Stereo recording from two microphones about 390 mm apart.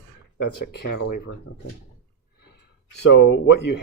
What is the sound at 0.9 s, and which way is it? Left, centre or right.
Speech, left.